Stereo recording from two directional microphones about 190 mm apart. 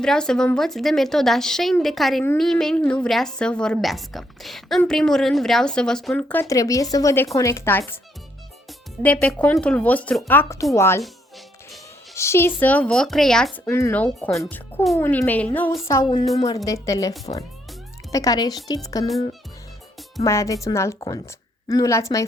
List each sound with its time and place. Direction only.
0.0 s a woman's voice: 5° left (ahead or behind)
9.0 s speech: 10° left (ahead or behind)
12.1 s speech: 15° left (ahead or behind)
13.7 s a woman's voice: 15° left (ahead or behind)
20.2 s speech: 15° left (ahead or behind)